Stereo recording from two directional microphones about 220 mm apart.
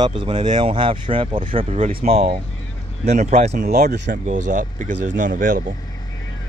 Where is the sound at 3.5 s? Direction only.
45° right (ahead or behind).